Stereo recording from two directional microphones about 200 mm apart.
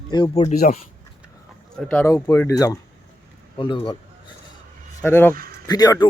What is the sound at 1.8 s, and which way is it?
Speech, 10° left (ahead or behind).